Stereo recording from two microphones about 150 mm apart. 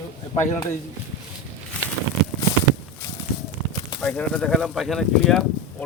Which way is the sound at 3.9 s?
5° left (ahead or behind).